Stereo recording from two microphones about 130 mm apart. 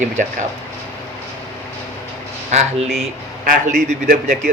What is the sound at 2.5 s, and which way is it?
Speech, 60° right (ahead or behind).